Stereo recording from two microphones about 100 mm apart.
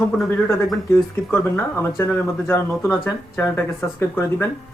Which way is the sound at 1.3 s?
25° left (ahead or behind).